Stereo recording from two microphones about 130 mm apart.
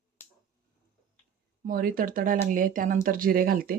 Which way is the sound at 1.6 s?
90° right.